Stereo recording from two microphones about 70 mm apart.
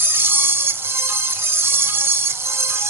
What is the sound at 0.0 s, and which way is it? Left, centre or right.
Music, right.